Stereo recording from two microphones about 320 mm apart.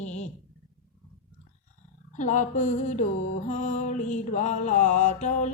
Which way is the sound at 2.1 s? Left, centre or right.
Left.